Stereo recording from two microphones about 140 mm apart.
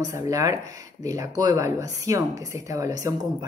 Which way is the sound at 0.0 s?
25° right (ahead or behind).